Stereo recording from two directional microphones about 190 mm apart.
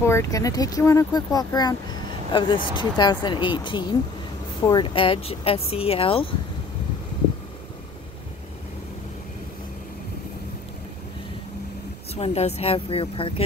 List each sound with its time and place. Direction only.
0.0 s speech: 15° left (ahead or behind)
12.1 s speech: 35° left (ahead or behind)